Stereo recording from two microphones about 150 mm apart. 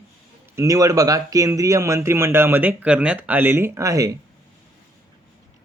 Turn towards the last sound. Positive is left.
turn(degrees=-20)  # may be behind; listen again after turning